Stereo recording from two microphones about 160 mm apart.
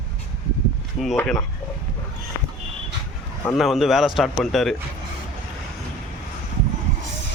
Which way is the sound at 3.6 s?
Centre (ahead or behind).